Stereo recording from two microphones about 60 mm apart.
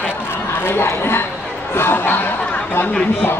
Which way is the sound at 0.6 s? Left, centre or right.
Left.